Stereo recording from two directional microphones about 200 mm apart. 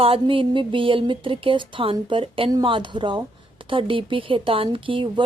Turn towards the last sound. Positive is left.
turn(degrees=-25)  # may be behind; listen again after turning